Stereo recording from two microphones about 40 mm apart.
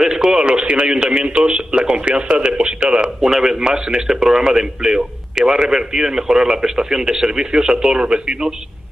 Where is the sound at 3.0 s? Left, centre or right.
Centre.